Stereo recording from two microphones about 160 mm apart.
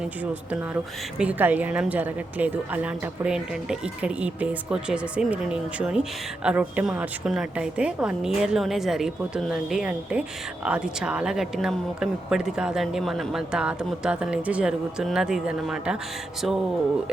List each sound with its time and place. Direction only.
1.2 s a woman's voice: 10° right (ahead or behind)